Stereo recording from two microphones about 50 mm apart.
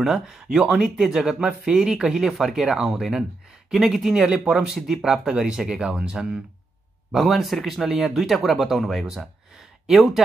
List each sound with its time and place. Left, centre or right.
0.0 s speech: centre
4.7 s speech: centre
7.1 s speech: centre